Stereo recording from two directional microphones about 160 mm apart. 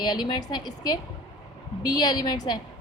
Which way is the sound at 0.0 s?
25° left (ahead or behind).